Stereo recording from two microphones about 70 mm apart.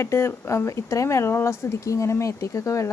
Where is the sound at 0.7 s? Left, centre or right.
Left.